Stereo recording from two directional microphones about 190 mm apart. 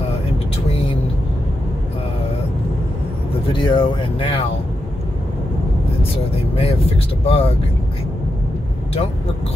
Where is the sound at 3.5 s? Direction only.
25° left (ahead or behind).